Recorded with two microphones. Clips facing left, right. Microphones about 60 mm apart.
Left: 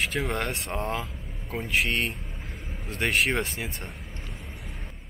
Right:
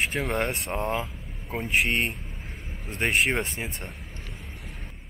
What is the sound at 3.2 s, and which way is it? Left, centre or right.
Speech, centre.